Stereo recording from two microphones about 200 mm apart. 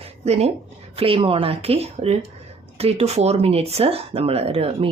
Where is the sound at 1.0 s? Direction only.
25° right (ahead or behind).